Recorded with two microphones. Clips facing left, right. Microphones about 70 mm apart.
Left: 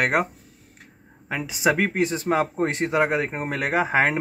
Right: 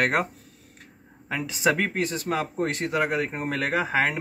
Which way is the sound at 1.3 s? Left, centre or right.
Centre.